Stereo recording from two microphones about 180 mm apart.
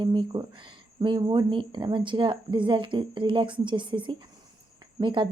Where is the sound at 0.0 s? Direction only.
25° right (ahead or behind).